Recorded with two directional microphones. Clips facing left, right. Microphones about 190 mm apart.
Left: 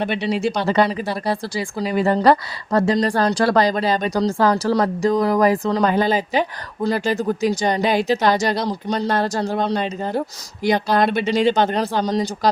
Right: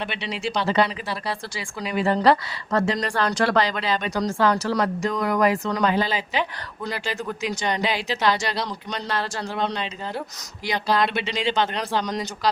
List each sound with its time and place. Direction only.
0.0 s speech: 45° left (ahead or behind)
5.9 s speech: 45° left (ahead or behind)
12.0 s speech: 30° left (ahead or behind)